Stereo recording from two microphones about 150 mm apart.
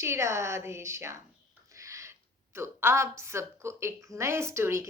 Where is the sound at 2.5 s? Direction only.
15° right (ahead or behind).